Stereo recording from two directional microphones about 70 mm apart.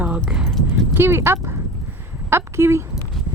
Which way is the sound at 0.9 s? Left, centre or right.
Right.